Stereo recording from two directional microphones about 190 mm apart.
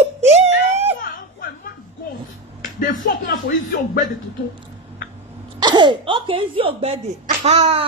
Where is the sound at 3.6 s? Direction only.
45° left (ahead or behind).